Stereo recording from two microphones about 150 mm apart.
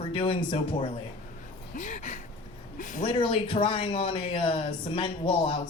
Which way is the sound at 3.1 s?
35° left (ahead or behind).